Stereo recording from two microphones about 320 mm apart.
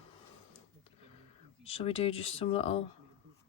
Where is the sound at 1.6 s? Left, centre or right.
Centre.